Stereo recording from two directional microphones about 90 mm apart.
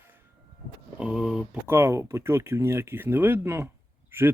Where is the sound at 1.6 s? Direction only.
25° right (ahead or behind).